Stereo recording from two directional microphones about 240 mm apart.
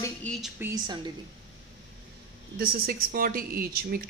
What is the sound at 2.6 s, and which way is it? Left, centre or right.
Speech, right.